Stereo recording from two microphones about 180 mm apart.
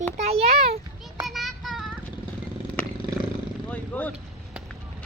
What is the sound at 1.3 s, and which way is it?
Child singing, centre (ahead or behind).